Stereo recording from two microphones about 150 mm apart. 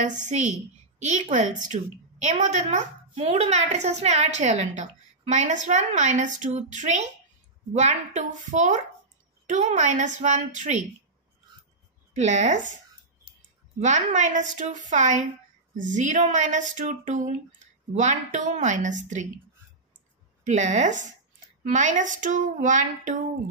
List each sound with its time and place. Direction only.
0.0 s a woman's voice: 55° right (ahead or behind)
12.1 s a woman's voice: 50° right (ahead or behind)
13.7 s a woman's voice: 50° right (ahead or behind)
20.4 s a woman's voice: 50° right (ahead or behind)